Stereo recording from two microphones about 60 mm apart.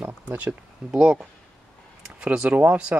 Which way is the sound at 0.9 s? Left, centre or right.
Centre.